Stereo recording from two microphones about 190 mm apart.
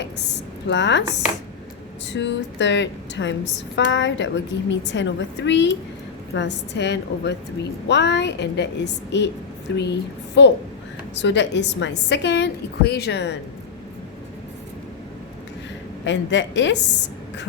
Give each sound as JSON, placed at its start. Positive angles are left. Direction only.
{"t": 0.7, "sound": "speech", "side_deg": 70}
{"t": 2.1, "sound": "a woman's voice", "side_deg": 70}
{"t": 16.0, "sound": "speech", "side_deg": 70}